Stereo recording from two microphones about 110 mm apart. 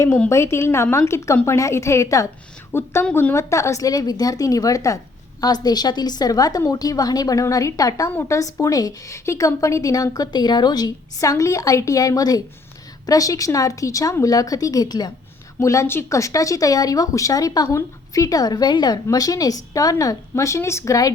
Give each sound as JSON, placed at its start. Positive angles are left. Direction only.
{"t": 0.3, "sound": "a woman's voice", "side_deg": 25}
{"t": 3.3, "sound": "a woman's voice", "side_deg": 30}
{"t": 15.6, "sound": "a woman's voice", "side_deg": 25}